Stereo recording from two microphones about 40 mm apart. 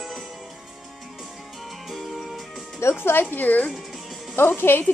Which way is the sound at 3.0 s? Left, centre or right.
Left.